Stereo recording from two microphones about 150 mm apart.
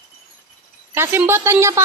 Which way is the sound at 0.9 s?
15° right (ahead or behind).